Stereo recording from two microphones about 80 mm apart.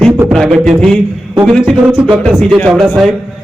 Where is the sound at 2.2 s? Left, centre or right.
Centre.